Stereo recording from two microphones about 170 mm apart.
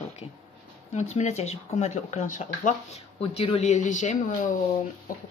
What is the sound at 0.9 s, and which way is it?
A woman's voice, 40° left (ahead or behind).